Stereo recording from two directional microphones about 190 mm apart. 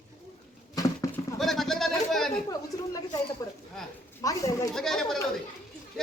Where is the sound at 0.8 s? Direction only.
15° left (ahead or behind).